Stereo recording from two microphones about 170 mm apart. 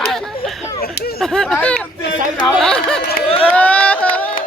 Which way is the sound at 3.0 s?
70° left (ahead or behind).